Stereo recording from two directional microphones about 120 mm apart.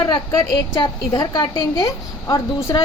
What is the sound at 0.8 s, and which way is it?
A woman's voice, 35° left (ahead or behind).